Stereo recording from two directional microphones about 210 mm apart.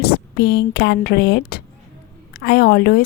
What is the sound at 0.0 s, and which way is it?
Speech, 50° left (ahead or behind).